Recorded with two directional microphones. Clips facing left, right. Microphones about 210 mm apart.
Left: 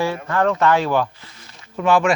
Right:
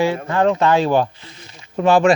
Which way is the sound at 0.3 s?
20° right (ahead or behind).